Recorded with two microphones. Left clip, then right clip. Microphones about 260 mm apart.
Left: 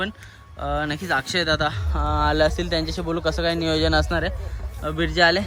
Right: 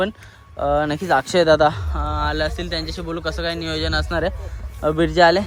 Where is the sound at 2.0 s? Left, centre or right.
Centre.